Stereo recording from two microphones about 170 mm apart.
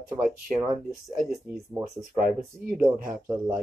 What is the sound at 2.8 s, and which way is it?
Speech, 55° right (ahead or behind).